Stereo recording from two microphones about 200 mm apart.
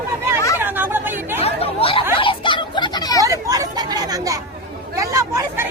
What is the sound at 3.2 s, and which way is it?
Chatter, 15° right (ahead or behind).